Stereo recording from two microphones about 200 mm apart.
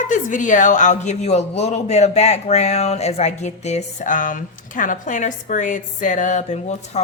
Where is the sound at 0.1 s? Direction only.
40° left (ahead or behind).